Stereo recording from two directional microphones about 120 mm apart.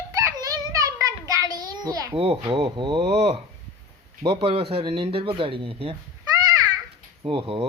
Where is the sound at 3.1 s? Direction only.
60° right (ahead or behind).